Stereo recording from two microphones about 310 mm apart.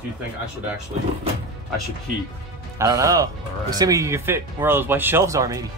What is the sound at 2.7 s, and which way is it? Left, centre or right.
Speech, centre.